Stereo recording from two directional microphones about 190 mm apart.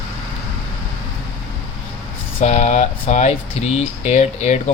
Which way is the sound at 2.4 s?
35° left (ahead or behind).